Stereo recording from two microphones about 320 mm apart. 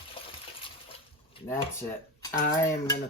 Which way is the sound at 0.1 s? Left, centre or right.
Centre.